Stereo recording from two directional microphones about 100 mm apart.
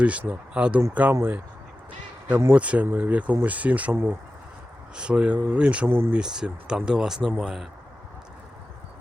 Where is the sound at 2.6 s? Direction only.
15° right (ahead or behind).